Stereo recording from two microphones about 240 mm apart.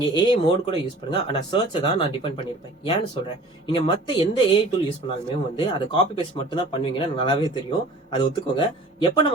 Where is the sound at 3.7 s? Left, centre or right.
Centre.